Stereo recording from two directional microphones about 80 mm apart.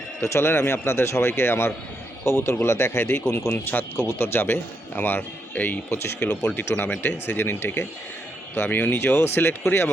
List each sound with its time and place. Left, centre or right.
0.2 s a man's voice: left
6.1 s a man's voice: centre